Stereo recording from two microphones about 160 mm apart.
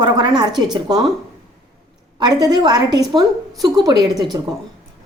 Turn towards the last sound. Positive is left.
turn(degrees=-25)  # may be behind; listen again after turning